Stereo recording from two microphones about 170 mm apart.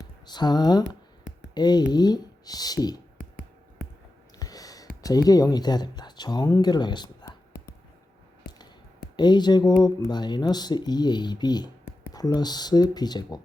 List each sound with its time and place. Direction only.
0.0 s speech: 25° left (ahead or behind)
4.4 s a sound: 20° left (ahead or behind)
5.0 s speech: 20° left (ahead or behind)
9.1 s speech: 25° left (ahead or behind)